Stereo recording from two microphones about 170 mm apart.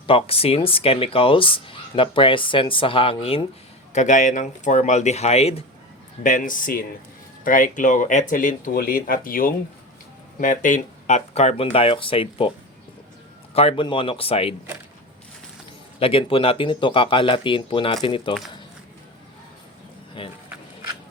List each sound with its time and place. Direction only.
0.1 s speech: 35° left (ahead or behind)
3.9 s speech: 45° left (ahead or behind)
6.2 s speech: 50° left (ahead or behind); by 14.5 s 35° left (ahead or behind)
16.0 s speech: 35° left (ahead or behind)